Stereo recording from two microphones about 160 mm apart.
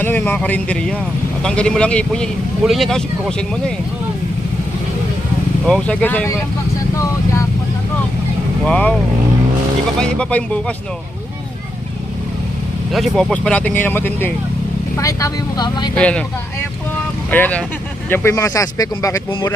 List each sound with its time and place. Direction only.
0.0 s speech: 10° left (ahead or behind)
5.6 s speech: 5° left (ahead or behind)
6.9 s vehicle: 20° left (ahead or behind)
8.6 s speech: 5° left (ahead or behind)
10.0 s speech: 5° left (ahead or behind)
12.9 s speech: centre (ahead or behind); by 15.9 s 25° left (ahead or behind)
16.0 s speech: 5° left (ahead or behind)
17.3 s speech: 10° left (ahead or behind)
19.3 s speech: 30° left (ahead or behind)